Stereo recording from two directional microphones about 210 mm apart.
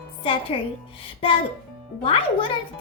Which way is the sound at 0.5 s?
25° left (ahead or behind).